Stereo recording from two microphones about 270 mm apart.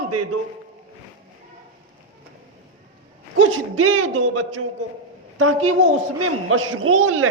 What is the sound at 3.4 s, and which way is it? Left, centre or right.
A man's voice, right.